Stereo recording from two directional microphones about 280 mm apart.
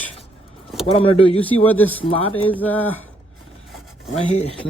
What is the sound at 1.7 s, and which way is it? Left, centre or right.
Speech, centre.